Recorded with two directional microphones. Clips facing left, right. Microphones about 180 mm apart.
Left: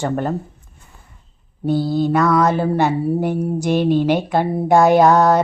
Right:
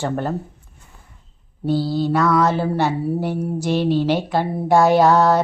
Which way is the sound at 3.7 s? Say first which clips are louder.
Left 2 dB; 50° left (ahead or behind).